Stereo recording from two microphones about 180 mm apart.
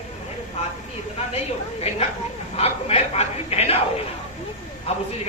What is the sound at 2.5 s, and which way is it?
A man's voice, 35° left (ahead or behind).